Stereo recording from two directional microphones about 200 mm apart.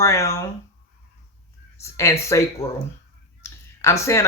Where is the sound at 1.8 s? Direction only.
15° left (ahead or behind).